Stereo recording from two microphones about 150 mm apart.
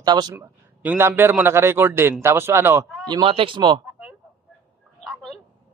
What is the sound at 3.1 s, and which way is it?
Speech, 35° right (ahead or behind).